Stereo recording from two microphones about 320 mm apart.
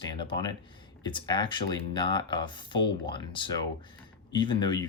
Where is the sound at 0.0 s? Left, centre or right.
Centre.